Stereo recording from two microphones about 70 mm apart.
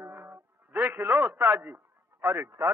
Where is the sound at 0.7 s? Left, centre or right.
Right.